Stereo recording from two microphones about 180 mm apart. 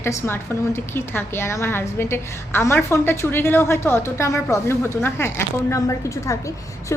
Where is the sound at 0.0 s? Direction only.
15° left (ahead or behind).